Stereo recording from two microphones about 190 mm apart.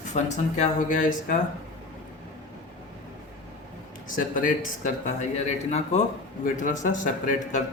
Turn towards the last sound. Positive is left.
turn(degrees=40)  # may be behind; listen again after turning